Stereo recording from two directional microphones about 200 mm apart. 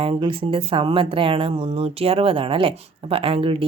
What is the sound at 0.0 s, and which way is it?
Speech, 25° right (ahead or behind).